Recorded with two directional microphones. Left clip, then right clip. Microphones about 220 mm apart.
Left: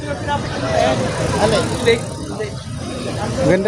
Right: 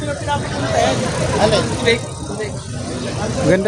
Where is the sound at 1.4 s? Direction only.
40° right (ahead or behind).